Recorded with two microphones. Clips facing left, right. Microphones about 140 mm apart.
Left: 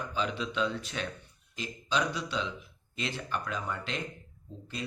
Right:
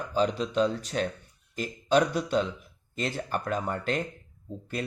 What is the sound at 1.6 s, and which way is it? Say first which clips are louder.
Speech: right 8 dB; 50° right (ahead or behind).